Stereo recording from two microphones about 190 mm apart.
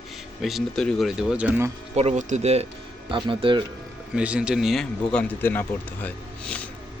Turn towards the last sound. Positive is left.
turn(degrees=5)  # may be behind; listen again after turning